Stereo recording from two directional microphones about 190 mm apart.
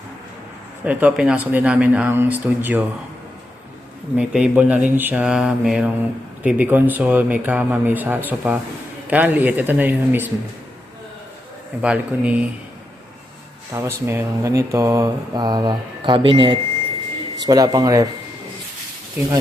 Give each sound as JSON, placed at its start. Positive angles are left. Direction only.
{"t": 0.9, "sound": "mantra", "side_deg": -10}
{"t": 4.2, "sound": "mantra", "side_deg": -5}
{"t": 11.8, "sound": "mantra", "side_deg": -5}
{"t": 13.7, "sound": "speech", "side_deg": -15}